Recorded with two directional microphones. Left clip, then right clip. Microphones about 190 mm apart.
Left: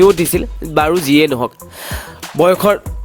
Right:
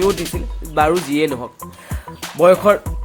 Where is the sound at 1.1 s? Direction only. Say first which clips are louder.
Left 7 dB; 50° left (ahead or behind).